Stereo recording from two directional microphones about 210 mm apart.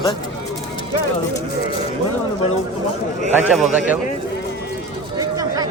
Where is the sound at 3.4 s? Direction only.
5° right (ahead or behind).